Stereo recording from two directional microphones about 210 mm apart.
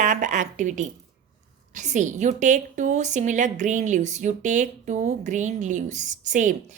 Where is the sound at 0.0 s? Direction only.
40° right (ahead or behind).